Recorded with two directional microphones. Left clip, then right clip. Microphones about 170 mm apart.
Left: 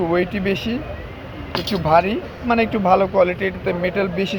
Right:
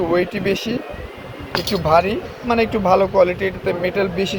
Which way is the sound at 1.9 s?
10° right (ahead or behind).